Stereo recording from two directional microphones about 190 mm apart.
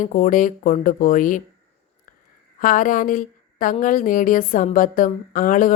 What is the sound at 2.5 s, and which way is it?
A woman's voice, 45° left (ahead or behind).